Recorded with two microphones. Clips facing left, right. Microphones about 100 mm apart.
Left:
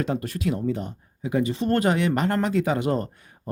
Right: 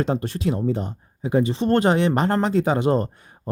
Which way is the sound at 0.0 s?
30° right (ahead or behind).